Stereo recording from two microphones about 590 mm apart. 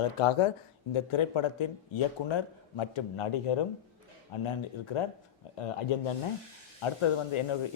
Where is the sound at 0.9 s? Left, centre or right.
Left.